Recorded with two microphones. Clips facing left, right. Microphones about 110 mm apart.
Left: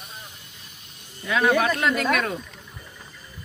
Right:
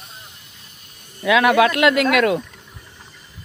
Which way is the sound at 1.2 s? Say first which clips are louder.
Right 6 dB; 70° right (ahead or behind).